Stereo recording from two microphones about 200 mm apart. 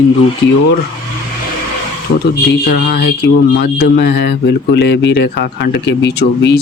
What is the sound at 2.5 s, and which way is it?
Speech, 50° left (ahead or behind).